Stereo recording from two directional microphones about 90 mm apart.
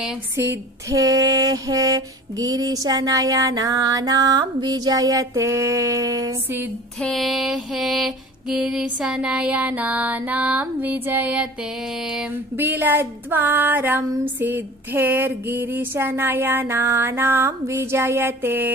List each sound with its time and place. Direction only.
0.8 s female singing: 40° right (ahead or behind)
7.0 s mantra: 5° left (ahead or behind); by 11.4 s 20° right (ahead or behind)
12.5 s a sound: 25° right (ahead or behind)